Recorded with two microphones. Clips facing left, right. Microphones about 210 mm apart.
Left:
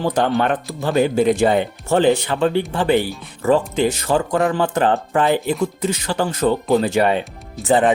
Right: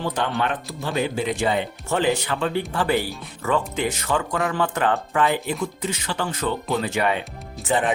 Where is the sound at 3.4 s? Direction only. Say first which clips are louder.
Left 7 dB; 35° left (ahead or behind).